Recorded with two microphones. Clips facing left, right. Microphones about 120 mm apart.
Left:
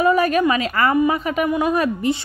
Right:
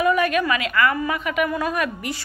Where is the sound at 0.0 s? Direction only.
35° left (ahead or behind).